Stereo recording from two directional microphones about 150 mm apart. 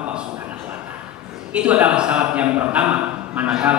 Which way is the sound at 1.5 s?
5° right (ahead or behind).